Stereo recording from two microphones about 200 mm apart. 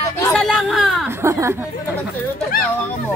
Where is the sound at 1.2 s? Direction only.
15° right (ahead or behind).